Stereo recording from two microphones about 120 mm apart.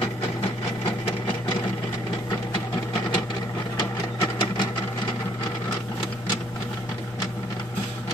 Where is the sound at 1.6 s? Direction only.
30° left (ahead or behind).